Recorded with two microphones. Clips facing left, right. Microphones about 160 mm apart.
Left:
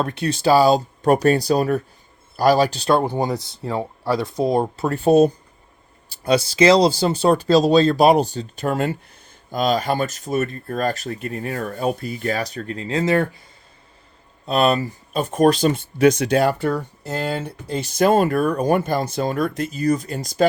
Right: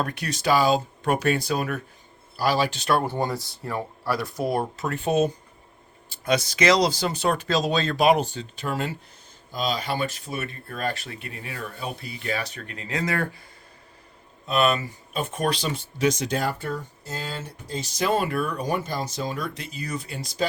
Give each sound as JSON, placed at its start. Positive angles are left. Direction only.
{"t": 0.0, "sound": "speech", "side_deg": 25}
{"t": 2.9, "sound": "speech", "side_deg": 20}
{"t": 14.4, "sound": "speech", "side_deg": 35}